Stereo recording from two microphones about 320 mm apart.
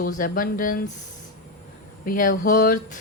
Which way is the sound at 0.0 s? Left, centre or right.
Left.